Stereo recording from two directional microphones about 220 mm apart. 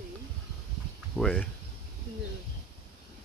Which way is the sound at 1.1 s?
5° left (ahead or behind).